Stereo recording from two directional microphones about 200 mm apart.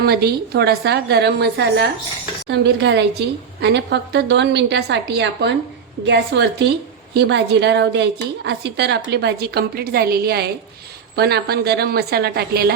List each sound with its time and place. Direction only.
0.0 s a woman's voice: 50° right (ahead or behind)